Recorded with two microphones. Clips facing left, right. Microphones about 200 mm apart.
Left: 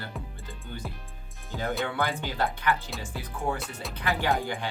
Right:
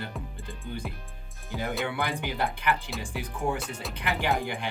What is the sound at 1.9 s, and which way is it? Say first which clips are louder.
Speech: left 1 dB; 15° right (ahead or behind).